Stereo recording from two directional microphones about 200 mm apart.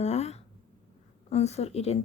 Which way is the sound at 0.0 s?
35° left (ahead or behind).